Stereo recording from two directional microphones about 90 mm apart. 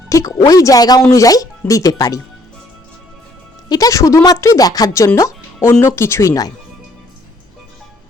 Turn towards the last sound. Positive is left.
turn(degrees=40)  # may be behind; listen again after turning